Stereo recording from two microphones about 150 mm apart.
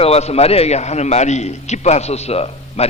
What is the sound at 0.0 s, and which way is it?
A man's voice, 45° left (ahead or behind).